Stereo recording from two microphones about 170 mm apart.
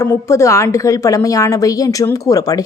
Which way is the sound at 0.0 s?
15° left (ahead or behind).